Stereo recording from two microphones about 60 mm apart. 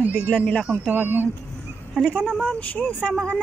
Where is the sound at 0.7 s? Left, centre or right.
Right.